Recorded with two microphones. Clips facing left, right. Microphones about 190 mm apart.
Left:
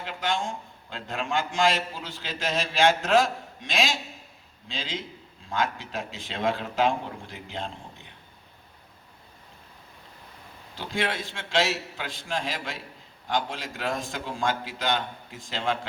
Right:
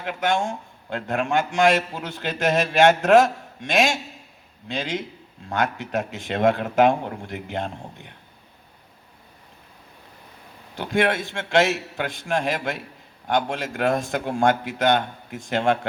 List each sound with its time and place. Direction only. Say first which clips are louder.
0.0 s a man's voice: right 6 dB; 55° right (ahead or behind)
3.6 s a man's voice: right 7 dB; 50° right (ahead or behind)
4.7 s a man's voice: right 7 dB; 65° right (ahead or behind)
10.8 s a man's voice: right 8 dB; 60° right (ahead or behind)
13.9 s a man's voice: right 8 dB; 55° right (ahead or behind)